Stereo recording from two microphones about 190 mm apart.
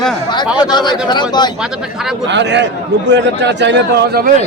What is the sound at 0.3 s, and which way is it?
A man's voice, 20° left (ahead or behind).